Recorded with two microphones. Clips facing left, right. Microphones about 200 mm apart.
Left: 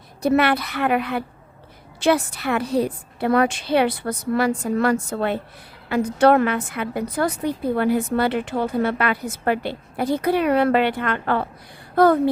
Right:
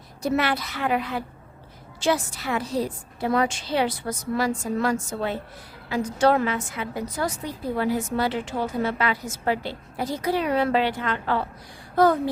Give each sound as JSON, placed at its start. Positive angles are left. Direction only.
{"t": 0.2, "sound": "a woman's voice", "side_deg": 60}